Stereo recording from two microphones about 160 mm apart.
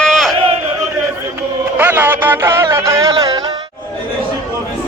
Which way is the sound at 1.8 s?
15° right (ahead or behind).